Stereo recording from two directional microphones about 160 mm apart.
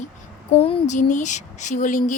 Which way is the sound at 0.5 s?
35° left (ahead or behind).